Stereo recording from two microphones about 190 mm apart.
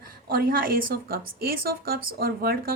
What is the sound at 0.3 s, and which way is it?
A woman's voice, 50° right (ahead or behind).